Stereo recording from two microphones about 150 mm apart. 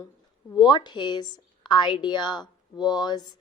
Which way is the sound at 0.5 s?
30° left (ahead or behind).